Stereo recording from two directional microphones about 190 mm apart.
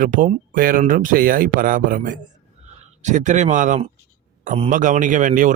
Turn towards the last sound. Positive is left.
turn(degrees=-45)  # may be behind; listen again after turning